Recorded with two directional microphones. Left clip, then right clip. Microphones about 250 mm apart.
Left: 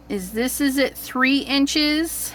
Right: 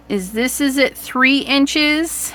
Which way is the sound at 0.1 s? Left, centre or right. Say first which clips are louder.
Right 5 dB; centre.